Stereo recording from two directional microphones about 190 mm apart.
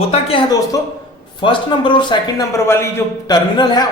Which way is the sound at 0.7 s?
15° left (ahead or behind).